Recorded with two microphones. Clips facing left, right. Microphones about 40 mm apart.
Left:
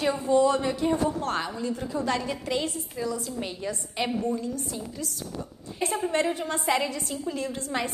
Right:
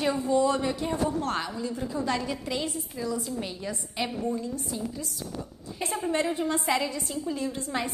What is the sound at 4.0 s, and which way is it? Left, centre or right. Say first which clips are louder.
Speech: left 2 dB; centre.